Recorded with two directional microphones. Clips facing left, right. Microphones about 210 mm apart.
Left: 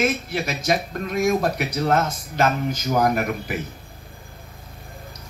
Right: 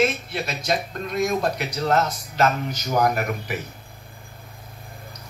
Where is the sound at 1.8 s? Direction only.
50° left (ahead or behind).